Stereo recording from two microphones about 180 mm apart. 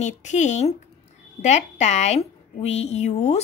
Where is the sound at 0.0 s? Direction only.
40° left (ahead or behind).